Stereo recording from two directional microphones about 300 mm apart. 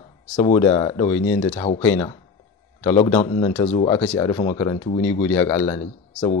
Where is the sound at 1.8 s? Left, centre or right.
Centre.